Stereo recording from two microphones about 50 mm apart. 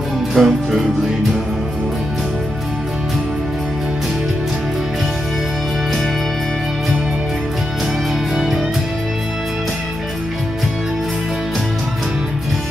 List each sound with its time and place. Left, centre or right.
0.3 s music: centre